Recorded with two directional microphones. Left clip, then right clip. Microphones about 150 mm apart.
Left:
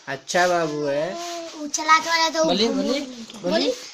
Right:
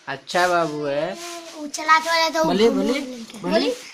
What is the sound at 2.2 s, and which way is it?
Speech, 25° right (ahead or behind).